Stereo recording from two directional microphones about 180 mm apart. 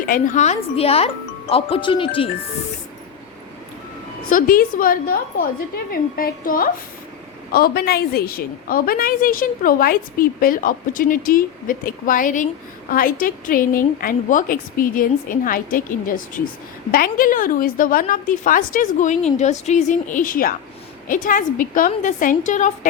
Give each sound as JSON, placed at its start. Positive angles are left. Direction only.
{"t": 0.0, "sound": "speech", "side_deg": 50}
{"t": 4.3, "sound": "a woman's voice", "side_deg": 50}